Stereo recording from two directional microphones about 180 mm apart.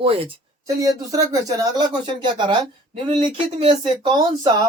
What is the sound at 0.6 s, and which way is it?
Speech, 20° right (ahead or behind).